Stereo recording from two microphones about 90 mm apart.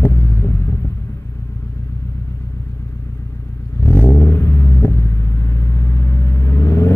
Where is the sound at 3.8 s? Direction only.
25° left (ahead or behind).